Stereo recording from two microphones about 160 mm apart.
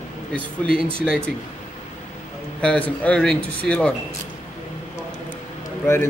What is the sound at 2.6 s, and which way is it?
Speech, 10° left (ahead or behind).